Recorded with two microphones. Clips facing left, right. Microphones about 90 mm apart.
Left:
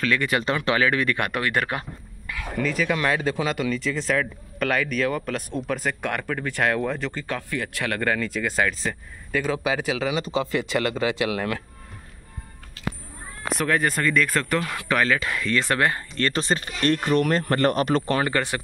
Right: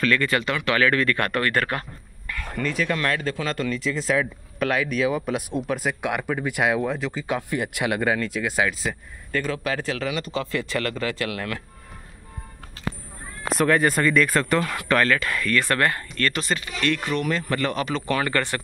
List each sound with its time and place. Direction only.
0.0 s speech: 10° left (ahead or behind)
0.4 s speech: 30° left (ahead or behind)
0.7 s a man's voice: 15° left (ahead or behind); by 7.3 s 5° right (ahead or behind)
7.3 s a man's voice: 20° right (ahead or behind)
9.3 s speech: 10° left (ahead or behind)
12.8 s cat: 35° right (ahead or behind)
13.5 s a man's voice: centre (ahead or behind)
15.1 s speech: 20° left (ahead or behind); by 18.1 s 45° left (ahead or behind)
18.2 s speech: 15° left (ahead or behind)